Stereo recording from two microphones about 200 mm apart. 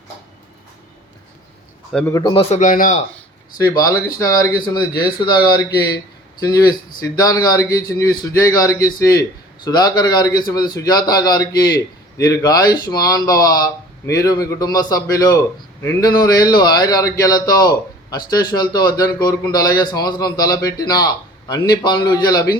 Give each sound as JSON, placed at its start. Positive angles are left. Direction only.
{"t": 1.9, "sound": "a man's voice", "side_deg": 5}
{"t": 2.1, "sound": "speech", "side_deg": 25}
{"t": 3.7, "sound": "a man's voice", "side_deg": 20}